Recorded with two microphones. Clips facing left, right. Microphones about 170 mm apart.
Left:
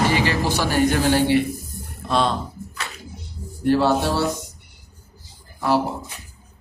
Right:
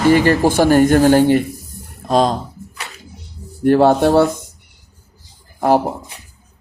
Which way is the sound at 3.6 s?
55° right (ahead or behind).